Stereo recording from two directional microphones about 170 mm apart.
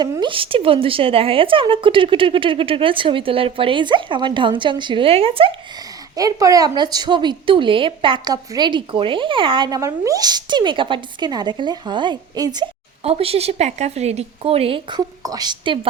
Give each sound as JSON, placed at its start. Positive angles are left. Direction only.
{"t": 0.0, "sound": "a woman's voice", "side_deg": -30}
{"t": 6.1, "sound": "a woman's voice", "side_deg": -20}
{"t": 13.1, "sound": "a woman's voice", "side_deg": -35}